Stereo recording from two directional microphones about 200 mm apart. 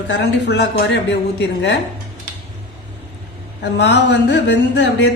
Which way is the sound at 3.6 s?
60° left (ahead or behind).